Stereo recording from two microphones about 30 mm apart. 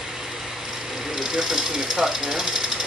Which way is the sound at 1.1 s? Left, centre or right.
Centre.